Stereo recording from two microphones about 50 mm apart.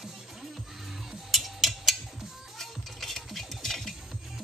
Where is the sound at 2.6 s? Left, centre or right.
Centre.